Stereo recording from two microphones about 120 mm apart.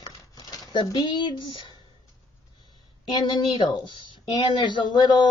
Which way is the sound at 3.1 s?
40° left (ahead or behind).